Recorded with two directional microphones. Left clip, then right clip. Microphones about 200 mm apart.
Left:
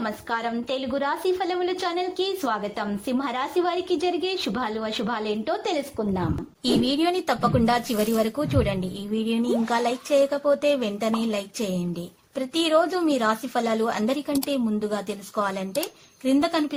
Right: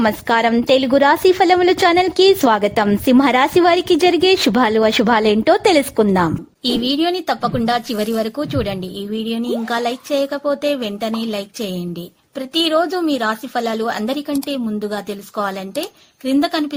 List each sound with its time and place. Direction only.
0.0 s a woman's voice: 45° right (ahead or behind)
6.8 s speech: 20° right (ahead or behind)
12.5 s speech: 25° right (ahead or behind)